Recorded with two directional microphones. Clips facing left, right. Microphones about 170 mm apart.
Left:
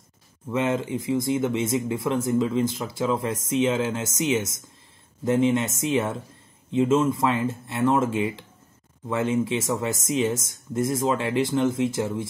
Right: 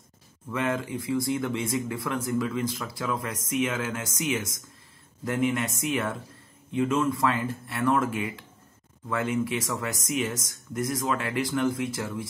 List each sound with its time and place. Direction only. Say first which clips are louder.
0.5 s speech: left 4 dB; 25° left (ahead or behind)